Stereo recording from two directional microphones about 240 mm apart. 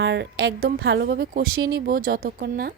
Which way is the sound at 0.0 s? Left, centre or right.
Right.